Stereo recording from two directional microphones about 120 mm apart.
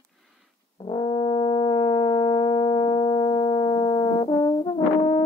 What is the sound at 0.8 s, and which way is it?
Brass instrument, 40° left (ahead or behind).